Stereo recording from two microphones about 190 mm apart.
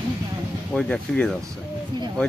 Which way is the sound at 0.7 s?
5° left (ahead or behind).